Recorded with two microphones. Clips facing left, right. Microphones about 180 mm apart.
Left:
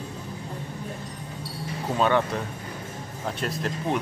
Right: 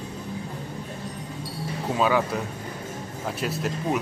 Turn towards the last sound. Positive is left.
turn(degrees=-5)  # may be behind; listen again after turning